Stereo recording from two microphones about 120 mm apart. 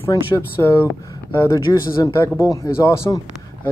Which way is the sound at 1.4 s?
30° left (ahead or behind).